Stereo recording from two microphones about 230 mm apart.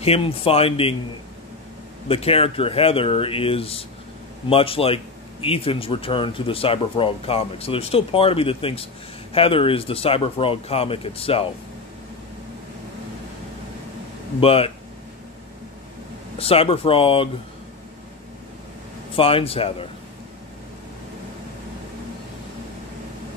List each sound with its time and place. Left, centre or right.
0.0 s speech: left
2.0 s speech: left
14.4 s speech: left
16.3 s speech: left
19.1 s speech: left